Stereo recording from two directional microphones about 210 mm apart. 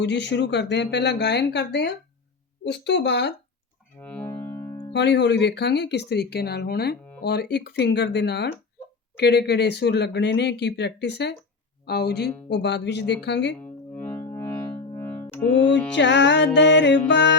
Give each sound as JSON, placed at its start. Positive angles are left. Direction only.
{"t": 0.0, "sound": "speech", "side_deg": 55}
{"t": 4.0, "sound": "music", "side_deg": 10}
{"t": 4.9, "sound": "speech", "side_deg": 55}
{"t": 13.2, "sound": "music", "side_deg": 55}
{"t": 13.6, "sound": "music", "side_deg": 10}
{"t": 16.0, "sound": "music", "side_deg": 55}